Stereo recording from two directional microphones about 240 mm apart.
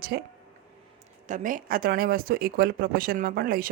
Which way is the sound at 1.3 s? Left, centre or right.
Right.